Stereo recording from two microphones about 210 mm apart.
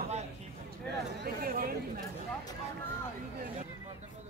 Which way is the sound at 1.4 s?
45° right (ahead or behind).